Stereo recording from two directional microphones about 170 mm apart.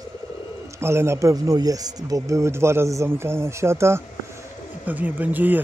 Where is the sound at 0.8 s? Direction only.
15° right (ahead or behind).